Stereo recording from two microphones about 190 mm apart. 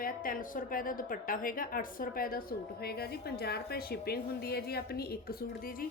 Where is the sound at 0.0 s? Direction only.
45° left (ahead or behind).